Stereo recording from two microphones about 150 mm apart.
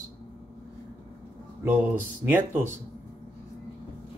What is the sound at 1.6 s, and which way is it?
Speech, 15° right (ahead or behind).